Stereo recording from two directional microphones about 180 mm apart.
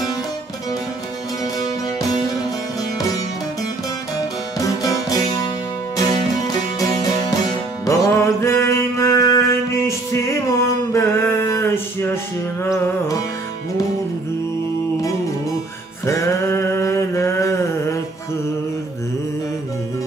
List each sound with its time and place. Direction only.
1.6 s music: 20° left (ahead or behind)
4.6 s music: 20° left (ahead or behind)
16.1 s a sound: 15° left (ahead or behind)